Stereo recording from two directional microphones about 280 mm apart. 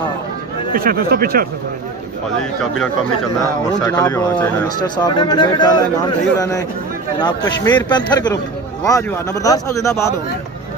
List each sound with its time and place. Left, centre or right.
0.7 s speech: right
3.8 s speech: centre